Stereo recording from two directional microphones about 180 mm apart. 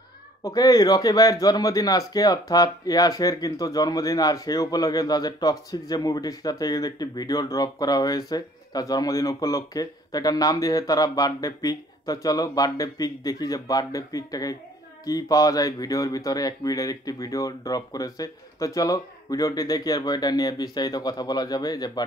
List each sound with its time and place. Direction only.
0.4 s a man's voice: 20° left (ahead or behind)